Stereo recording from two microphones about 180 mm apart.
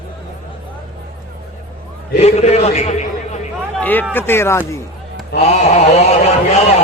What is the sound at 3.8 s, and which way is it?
Speech, 10° left (ahead or behind).